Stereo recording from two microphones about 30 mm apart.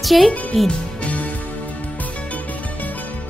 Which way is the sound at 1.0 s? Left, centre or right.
Left.